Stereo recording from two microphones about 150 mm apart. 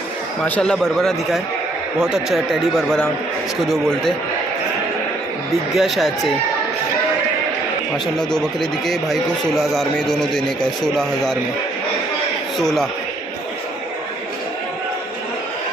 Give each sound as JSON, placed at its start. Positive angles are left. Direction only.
{"t": 0.6, "sound": "speech", "side_deg": 5}
{"t": 5.7, "sound": "speech", "side_deg": 0}
{"t": 8.2, "sound": "speech", "side_deg": 5}
{"t": 12.5, "sound": "a man's voice", "side_deg": 0}